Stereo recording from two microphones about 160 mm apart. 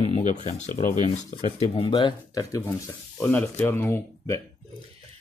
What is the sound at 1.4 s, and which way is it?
Speech, 35° left (ahead or behind).